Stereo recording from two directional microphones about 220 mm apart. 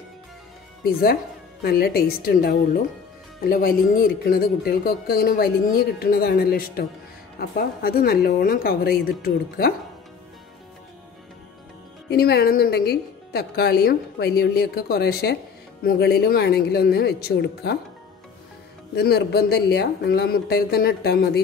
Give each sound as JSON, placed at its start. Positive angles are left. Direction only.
{"t": 1.6, "sound": "speech", "side_deg": 45}
{"t": 12.1, "sound": "speech", "side_deg": 45}
{"t": 18.9, "sound": "speech", "side_deg": 45}